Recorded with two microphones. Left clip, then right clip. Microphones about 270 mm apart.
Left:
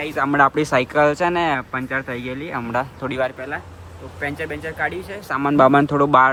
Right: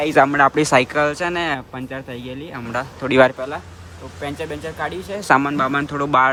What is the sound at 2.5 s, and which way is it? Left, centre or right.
Speech, centre.